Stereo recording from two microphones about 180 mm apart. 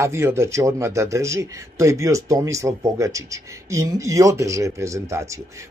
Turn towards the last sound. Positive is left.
turn(degrees=-15)  # may be behind; listen again after turning